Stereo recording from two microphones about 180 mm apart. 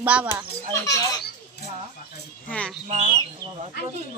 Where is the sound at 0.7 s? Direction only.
20° left (ahead or behind).